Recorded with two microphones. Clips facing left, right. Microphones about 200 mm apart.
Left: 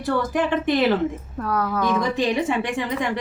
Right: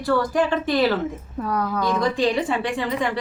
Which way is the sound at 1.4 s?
Centre (ahead or behind).